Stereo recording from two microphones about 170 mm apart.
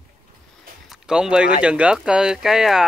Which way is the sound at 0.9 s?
5° right (ahead or behind).